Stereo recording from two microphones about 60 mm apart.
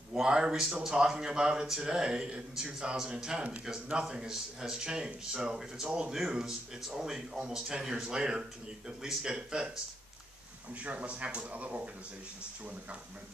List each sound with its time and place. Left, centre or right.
0.1 s speech: centre
10.8 s speech: right